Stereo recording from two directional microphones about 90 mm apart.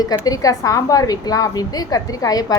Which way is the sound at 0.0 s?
45° left (ahead or behind).